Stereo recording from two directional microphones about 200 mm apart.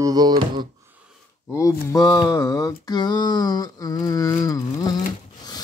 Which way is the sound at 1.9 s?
20° left (ahead or behind).